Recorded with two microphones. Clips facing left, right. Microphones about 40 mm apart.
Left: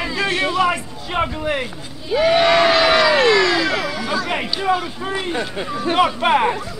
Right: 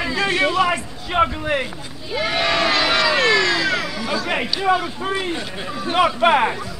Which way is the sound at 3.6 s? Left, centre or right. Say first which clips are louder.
Left 1 dB; centre.